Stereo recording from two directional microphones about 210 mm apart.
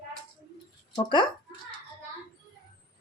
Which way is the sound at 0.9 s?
20° left (ahead or behind).